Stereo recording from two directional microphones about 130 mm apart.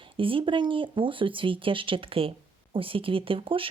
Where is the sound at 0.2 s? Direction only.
40° right (ahead or behind).